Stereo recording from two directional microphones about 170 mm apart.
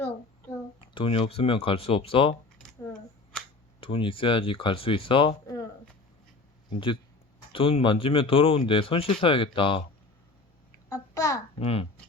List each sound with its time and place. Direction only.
0.8 s speech: 30° left (ahead or behind)
2.6 s scissors: 5° left (ahead or behind)
3.8 s speech: 30° left (ahead or behind)
6.7 s speech: 30° left (ahead or behind)
10.8 s babbling: 20° left (ahead or behind)
11.6 s speech: 35° left (ahead or behind)